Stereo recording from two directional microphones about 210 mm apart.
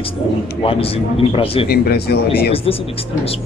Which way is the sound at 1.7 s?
50° left (ahead or behind).